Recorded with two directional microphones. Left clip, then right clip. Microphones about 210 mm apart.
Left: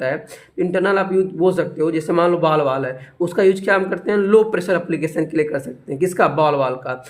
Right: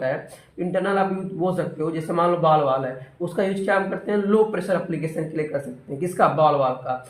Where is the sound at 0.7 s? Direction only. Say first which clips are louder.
Left 4 dB; 40° left (ahead or behind).